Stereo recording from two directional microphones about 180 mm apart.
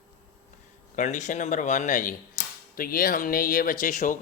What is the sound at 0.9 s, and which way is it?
Speech, 40° left (ahead or behind).